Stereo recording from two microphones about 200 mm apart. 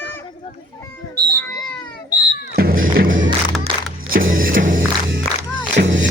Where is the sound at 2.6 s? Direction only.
45° right (ahead or behind).